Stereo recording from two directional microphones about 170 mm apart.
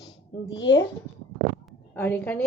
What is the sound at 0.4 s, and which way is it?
Speech, 90° left.